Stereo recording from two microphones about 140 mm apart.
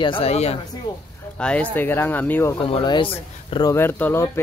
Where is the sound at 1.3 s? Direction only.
10° left (ahead or behind).